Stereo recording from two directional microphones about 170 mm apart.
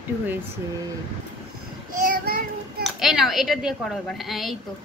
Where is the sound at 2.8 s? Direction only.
Centre (ahead or behind).